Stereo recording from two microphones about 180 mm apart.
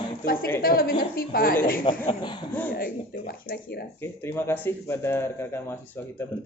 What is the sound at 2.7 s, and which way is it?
Speech, 55° left (ahead or behind).